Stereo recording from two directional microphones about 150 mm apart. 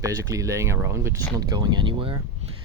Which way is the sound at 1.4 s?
30° right (ahead or behind).